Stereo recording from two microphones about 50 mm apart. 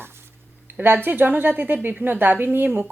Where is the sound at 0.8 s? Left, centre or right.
Right.